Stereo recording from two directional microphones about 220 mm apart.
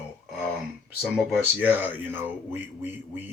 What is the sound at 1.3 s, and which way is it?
Speech, 5° right (ahead or behind).